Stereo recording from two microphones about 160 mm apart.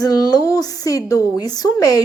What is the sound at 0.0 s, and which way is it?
A woman's voice, 25° left (ahead or behind).